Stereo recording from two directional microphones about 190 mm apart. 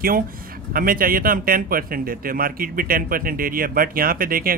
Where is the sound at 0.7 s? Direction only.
50° right (ahead or behind).